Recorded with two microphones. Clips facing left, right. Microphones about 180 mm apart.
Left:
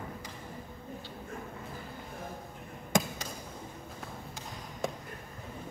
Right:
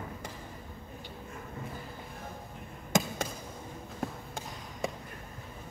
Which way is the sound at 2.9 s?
Centre (ahead or behind).